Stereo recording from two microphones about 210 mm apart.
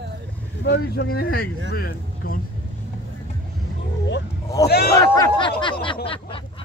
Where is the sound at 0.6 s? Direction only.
50° left (ahead or behind).